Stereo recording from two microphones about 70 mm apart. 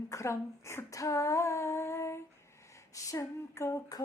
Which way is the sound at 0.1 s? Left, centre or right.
Left.